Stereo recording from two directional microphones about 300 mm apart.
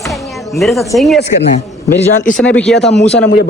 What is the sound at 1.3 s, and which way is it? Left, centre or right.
A man's voice, left.